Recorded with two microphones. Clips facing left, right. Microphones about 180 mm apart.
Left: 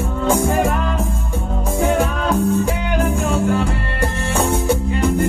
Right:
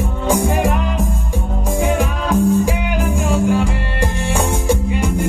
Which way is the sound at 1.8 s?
15° right (ahead or behind).